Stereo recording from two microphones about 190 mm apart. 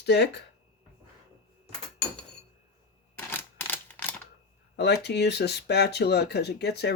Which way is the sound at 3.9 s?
5° left (ahead or behind).